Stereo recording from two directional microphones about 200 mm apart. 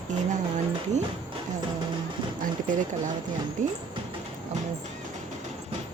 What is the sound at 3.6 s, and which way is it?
Speech, 35° right (ahead or behind).